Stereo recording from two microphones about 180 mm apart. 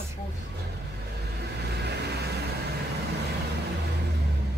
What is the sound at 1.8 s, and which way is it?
Vehicle, 65° right (ahead or behind).